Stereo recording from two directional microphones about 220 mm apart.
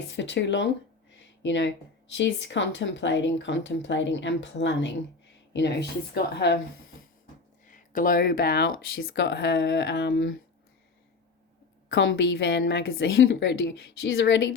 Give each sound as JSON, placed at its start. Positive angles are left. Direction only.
{"t": 0.1, "sound": "speech", "side_deg": 55}
{"t": 7.7, "sound": "speech", "side_deg": 35}
{"t": 11.9, "sound": "speech", "side_deg": 55}